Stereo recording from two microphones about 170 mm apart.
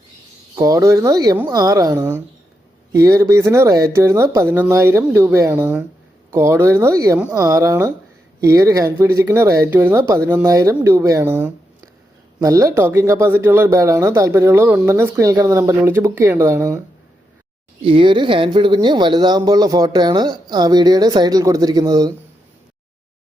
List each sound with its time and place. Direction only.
0.5 s speech: 20° right (ahead or behind)
17.8 s speech: 30° right (ahead or behind)